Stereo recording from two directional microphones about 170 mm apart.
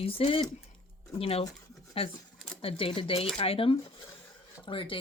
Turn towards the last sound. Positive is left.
turn(degrees=30)  # may be behind; listen again after turning